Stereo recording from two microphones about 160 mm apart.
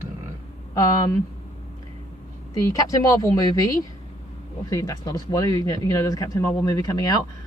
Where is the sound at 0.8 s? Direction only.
20° left (ahead or behind).